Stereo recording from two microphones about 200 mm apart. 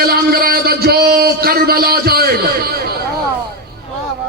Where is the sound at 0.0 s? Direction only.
50° right (ahead or behind).